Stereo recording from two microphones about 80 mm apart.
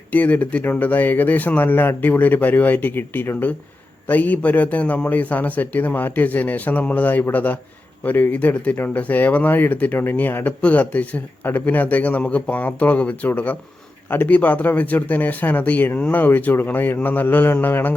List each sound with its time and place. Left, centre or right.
0.1 s speech: left